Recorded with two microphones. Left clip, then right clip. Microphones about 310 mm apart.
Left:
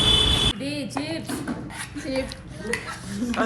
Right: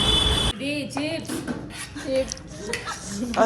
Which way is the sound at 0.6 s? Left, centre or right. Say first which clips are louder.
Right 2 dB; centre.